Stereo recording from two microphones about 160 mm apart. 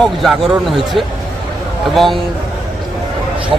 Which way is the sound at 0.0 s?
Centre (ahead or behind).